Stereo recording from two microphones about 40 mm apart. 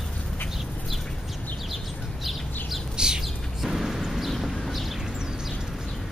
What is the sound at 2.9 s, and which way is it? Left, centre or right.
Bird, centre.